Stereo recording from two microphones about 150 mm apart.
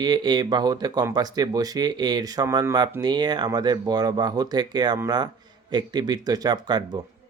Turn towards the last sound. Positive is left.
turn(degrees=-30)  # may be behind; listen again after turning